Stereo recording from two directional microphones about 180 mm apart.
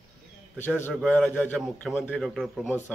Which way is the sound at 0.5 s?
10° left (ahead or behind).